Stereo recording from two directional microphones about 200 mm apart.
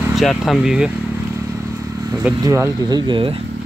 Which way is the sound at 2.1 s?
15° right (ahead or behind).